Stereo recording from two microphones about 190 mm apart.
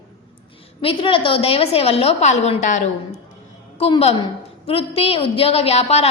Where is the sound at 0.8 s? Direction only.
25° left (ahead or behind).